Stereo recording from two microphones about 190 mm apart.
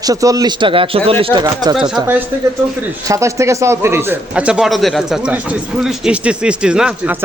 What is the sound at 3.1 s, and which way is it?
A man's voice, 15° right (ahead or behind).